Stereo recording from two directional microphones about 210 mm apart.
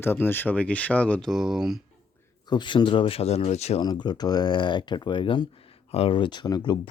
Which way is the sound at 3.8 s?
20° left (ahead or behind).